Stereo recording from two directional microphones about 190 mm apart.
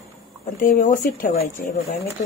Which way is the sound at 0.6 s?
45° left (ahead or behind).